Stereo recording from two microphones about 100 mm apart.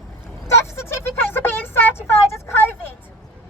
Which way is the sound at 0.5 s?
25° left (ahead or behind).